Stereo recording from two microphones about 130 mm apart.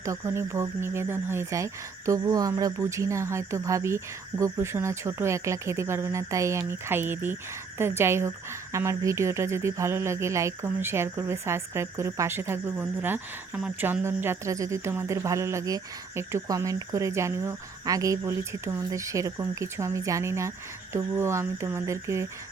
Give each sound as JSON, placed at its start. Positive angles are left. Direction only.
{"t": 0.0, "sound": "speech", "side_deg": -25}